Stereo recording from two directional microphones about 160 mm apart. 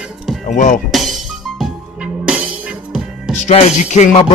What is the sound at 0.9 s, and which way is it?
Speech, centre (ahead or behind).